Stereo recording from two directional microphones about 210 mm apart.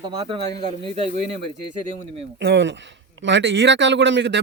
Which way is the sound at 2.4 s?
60° right (ahead or behind).